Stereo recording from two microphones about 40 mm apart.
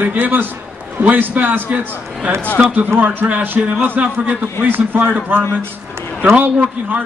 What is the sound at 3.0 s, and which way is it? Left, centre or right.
A man's voice, right.